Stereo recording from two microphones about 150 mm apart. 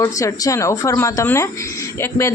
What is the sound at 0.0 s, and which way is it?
Speech, 20° left (ahead or behind).